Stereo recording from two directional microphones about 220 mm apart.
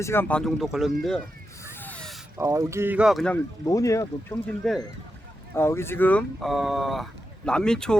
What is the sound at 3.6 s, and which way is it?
Speech, 15° left (ahead or behind).